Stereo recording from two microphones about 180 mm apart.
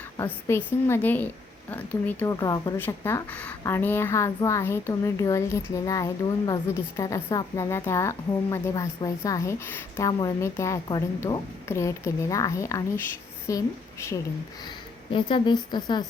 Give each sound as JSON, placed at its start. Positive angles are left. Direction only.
{"t": 0.4, "sound": "a woman's voice", "side_deg": 15}